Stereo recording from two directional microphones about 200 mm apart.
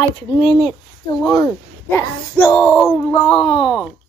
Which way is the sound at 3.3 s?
25° left (ahead or behind).